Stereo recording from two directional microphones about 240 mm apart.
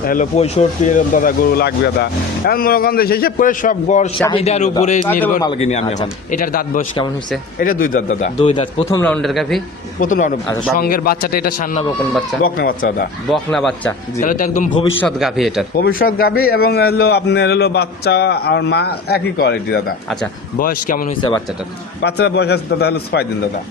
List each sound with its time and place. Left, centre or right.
0.0 s a man's voice: left
8.9 s speech: centre
10.0 s a man's voice: left
13.3 s speech: centre
14.2 s a man's voice: left
15.0 s speech: centre
15.7 s a man's voice: left